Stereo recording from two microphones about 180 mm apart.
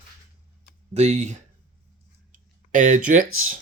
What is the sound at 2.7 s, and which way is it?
Speech, 45° right (ahead or behind).